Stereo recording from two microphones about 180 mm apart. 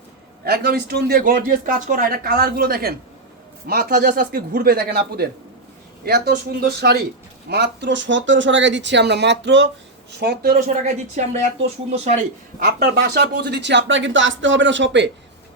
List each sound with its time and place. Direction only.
0.4 s a man's voice: 60° right (ahead or behind)
10.1 s a man's voice: 65° right (ahead or behind); by 12.1 s 35° right (ahead or behind)
12.5 s speech: 60° right (ahead or behind); by 15.1 s 85° right